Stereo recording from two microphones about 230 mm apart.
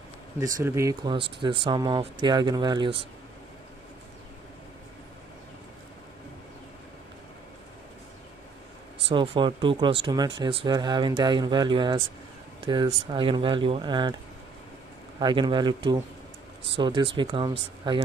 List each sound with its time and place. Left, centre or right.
0.4 s speech: centre
9.1 s speech: right
15.1 s speech: centre